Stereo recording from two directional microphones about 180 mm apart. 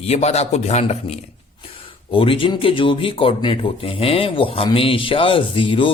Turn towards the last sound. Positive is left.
turn(degrees=30)  # may be behind; listen again after turning